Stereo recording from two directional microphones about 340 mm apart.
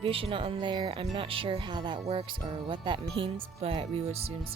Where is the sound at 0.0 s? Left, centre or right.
Centre.